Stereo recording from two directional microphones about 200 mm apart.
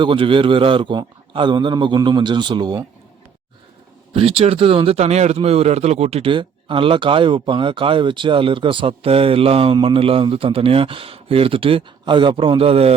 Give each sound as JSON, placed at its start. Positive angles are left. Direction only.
{"t": 0.0, "sound": "speech", "side_deg": -25}
{"t": 4.1, "sound": "speech", "side_deg": -30}